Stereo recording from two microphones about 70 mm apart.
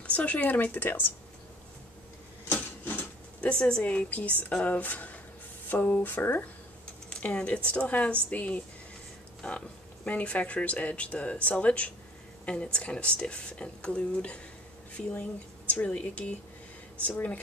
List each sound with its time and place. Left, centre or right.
0.0 s speech: left
2.5 s speech: left